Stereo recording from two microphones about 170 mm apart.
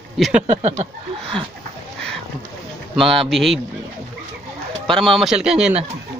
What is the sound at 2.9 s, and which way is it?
Speech, centre (ahead or behind).